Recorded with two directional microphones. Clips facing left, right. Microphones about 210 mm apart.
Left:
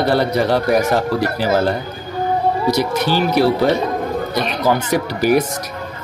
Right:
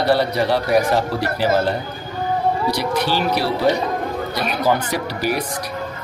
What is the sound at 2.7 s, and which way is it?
Speech, 45° left (ahead or behind).